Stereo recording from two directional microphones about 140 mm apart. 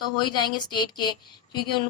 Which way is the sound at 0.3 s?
30° left (ahead or behind).